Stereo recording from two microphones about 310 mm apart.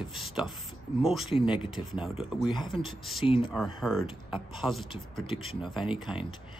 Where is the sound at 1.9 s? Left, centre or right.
Centre.